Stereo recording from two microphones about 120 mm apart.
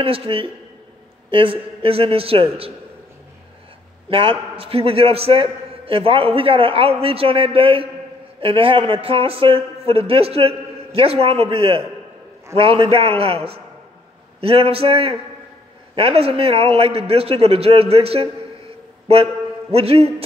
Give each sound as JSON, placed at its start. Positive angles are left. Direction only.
{"t": 0.0, "sound": "a man's voice", "side_deg": -50}
{"t": 4.1, "sound": "a man's voice", "side_deg": -50}
{"t": 19.7, "sound": "a man's voice", "side_deg": -55}